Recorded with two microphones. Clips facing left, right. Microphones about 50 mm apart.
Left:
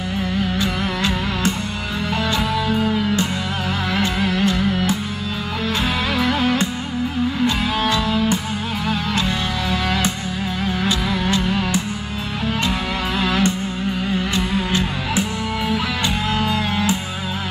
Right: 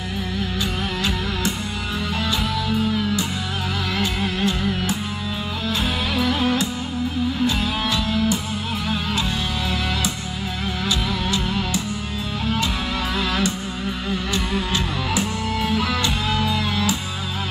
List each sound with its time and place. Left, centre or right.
0.6 s music: left
2.7 s music: left
6.1 s music: left
10.8 s music: left
13.2 s music: left
16.3 s music: left